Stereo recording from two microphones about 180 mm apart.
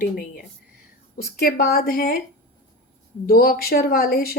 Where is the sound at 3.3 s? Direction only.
55° left (ahead or behind).